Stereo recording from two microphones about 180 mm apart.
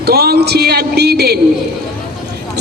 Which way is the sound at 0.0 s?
60° right (ahead or behind).